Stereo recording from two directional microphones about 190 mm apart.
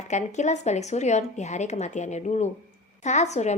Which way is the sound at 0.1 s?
40° left (ahead or behind).